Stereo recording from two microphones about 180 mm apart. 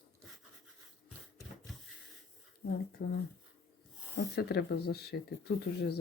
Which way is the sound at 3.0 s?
60° left (ahead or behind).